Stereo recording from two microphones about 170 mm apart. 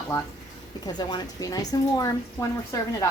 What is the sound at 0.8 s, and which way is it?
Speech, 25° left (ahead or behind).